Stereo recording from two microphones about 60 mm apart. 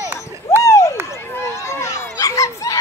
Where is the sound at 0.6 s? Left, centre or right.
Left.